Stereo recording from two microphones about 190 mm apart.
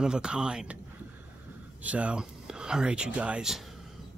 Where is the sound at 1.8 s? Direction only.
5° right (ahead or behind).